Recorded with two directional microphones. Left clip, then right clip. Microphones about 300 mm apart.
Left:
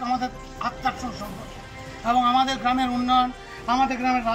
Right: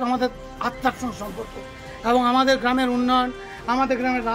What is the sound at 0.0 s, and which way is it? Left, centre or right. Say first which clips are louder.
Music: right 3 dB; right.